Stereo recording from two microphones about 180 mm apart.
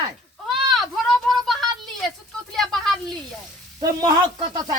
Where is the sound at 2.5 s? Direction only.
Centre (ahead or behind).